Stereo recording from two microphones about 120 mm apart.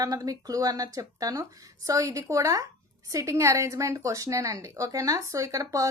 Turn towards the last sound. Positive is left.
turn(degrees=-30)  # may be behind; listen again after turning